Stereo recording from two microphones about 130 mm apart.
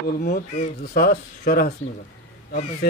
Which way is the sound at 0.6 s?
85° left.